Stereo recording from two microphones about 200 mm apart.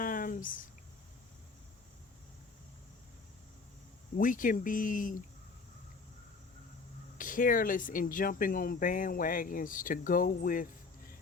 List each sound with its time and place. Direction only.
0.0 s a sound: 45° left (ahead or behind)
4.2 s speech: 40° left (ahead or behind)
7.2 s speech: 40° left (ahead or behind)